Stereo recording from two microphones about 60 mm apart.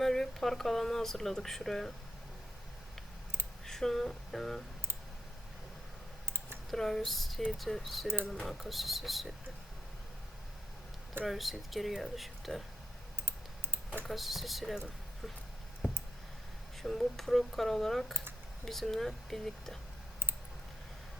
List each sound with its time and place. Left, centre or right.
0.0 s speech: centre
3.7 s a sound: centre
6.2 s clicking: right
6.7 s speech: centre
8.0 s speech: right
8.4 s speech: centre
11.3 s speech: centre
13.2 s typing: right
14.1 s speech: centre
16.8 s speech: centre